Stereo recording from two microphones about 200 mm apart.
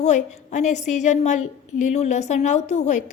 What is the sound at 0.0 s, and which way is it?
A woman's voice, 35° left (ahead or behind).